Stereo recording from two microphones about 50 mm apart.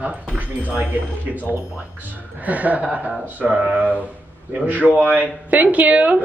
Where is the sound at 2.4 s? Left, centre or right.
Right.